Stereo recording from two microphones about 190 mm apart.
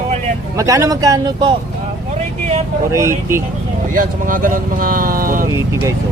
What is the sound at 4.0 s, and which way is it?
Speech, 45° right (ahead or behind).